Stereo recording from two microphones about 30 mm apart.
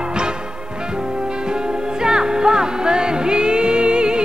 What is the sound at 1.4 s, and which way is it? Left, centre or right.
Music, right.